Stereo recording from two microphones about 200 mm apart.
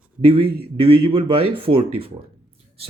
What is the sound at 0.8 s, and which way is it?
Speech, 25° right (ahead or behind).